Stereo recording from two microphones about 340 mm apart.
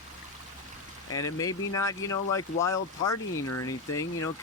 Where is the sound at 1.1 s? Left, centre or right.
Centre.